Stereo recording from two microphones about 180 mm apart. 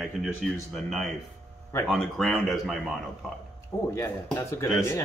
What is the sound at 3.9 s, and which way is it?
Speech, 15° left (ahead or behind).